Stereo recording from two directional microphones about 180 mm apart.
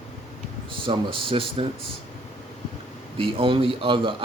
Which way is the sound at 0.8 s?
30° right (ahead or behind).